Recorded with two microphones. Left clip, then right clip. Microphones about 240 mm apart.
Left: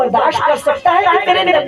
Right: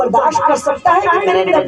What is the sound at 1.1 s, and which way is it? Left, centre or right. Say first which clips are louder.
Speech: left 1 dB; left.